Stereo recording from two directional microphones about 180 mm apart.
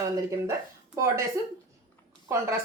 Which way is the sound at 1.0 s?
15° right (ahead or behind).